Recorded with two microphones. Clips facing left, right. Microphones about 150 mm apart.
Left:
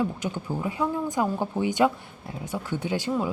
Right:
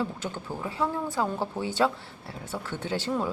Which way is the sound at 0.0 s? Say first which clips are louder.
Left 4 dB; 15° left (ahead or behind).